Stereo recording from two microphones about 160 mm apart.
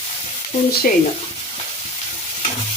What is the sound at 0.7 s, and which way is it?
Frying, 70° left (ahead or behind).